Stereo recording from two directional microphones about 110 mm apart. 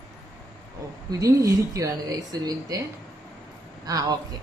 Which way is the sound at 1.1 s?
30° right (ahead or behind).